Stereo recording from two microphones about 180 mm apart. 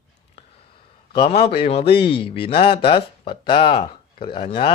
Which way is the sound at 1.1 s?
30° left (ahead or behind).